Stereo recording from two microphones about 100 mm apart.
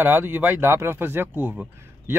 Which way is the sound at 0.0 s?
20° right (ahead or behind).